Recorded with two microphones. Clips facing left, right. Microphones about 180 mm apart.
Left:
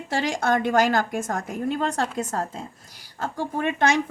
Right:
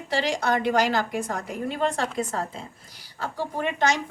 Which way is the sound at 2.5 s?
45° left (ahead or behind).